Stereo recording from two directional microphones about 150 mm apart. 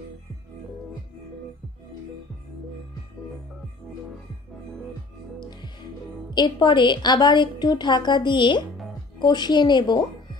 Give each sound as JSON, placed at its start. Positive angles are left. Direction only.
{"t": 6.3, "sound": "a woman's voice", "side_deg": 30}